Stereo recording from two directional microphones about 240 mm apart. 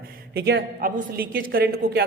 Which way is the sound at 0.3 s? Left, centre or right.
Right.